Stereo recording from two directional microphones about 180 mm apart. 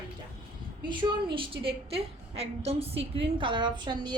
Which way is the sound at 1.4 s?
30° right (ahead or behind).